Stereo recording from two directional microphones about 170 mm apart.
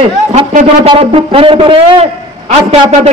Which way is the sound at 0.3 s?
45° right (ahead or behind).